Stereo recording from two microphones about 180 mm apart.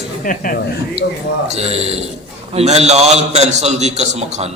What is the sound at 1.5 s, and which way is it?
A man's voice, 35° right (ahead or behind).